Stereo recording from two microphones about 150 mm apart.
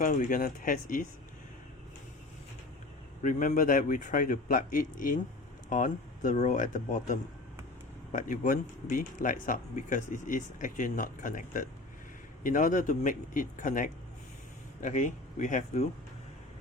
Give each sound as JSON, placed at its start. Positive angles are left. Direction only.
{"t": 0.0, "sound": "speech", "side_deg": 60}
{"t": 3.2, "sound": "speech", "side_deg": 60}